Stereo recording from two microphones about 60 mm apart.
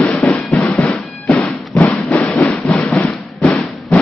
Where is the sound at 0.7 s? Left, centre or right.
Centre.